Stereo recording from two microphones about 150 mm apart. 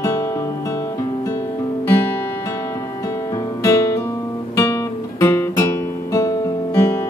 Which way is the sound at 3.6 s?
20° left (ahead or behind).